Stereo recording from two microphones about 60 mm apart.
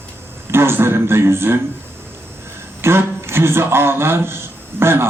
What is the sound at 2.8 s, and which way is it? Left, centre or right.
A man's voice, right.